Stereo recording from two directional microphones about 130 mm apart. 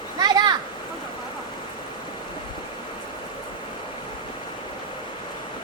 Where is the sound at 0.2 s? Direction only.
30° right (ahead or behind).